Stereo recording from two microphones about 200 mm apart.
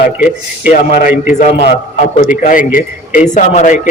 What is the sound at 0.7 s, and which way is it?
A man's voice, 40° left (ahead or behind).